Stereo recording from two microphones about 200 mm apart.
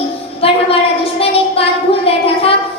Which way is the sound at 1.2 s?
30° left (ahead or behind).